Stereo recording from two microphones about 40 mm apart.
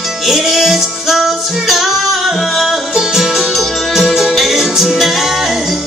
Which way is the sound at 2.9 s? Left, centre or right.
Centre.